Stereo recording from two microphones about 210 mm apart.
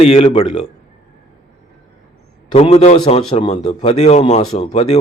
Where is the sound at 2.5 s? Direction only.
30° left (ahead or behind).